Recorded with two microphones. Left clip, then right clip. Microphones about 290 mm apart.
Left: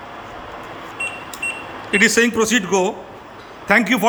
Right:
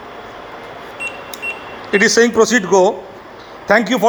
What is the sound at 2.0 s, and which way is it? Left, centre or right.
Speech, left.